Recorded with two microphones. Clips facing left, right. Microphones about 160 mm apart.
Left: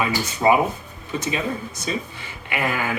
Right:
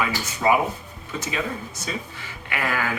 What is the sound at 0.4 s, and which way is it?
Speech, 25° left (ahead or behind).